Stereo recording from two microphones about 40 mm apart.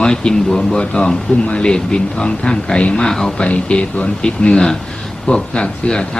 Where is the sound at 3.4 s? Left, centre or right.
Left.